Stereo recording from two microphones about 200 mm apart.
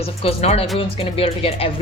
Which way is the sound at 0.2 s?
30° left (ahead or behind).